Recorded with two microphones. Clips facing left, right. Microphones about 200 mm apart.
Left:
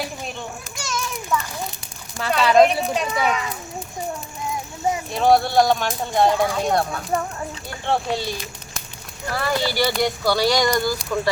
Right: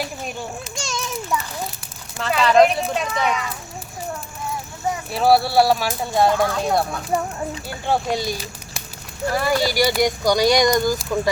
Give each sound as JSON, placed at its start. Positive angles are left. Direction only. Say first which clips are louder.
{"t": 0.8, "sound": "children playing", "louder": "even", "side_deg": -25}
{"t": 2.1, "sound": "speech", "louder": "even", "side_deg": 0}
{"t": 5.1, "sound": "speech", "louder": "right 1 dB", "side_deg": -5}